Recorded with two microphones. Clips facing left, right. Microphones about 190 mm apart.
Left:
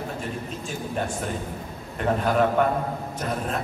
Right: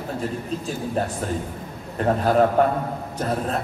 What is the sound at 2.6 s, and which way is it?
Speech, 35° right (ahead or behind).